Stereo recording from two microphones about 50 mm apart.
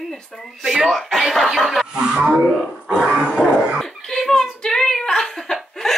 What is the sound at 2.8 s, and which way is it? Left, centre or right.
Dog, centre.